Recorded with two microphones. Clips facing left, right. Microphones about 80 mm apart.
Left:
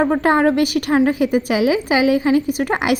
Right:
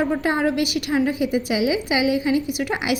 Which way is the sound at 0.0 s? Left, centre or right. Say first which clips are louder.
Left 6 dB; left.